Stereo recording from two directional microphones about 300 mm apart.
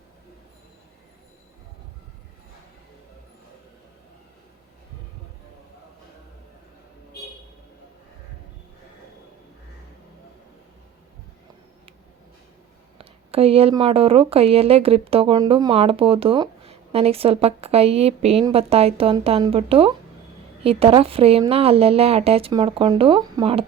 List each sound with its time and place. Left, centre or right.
13.0 s speech: centre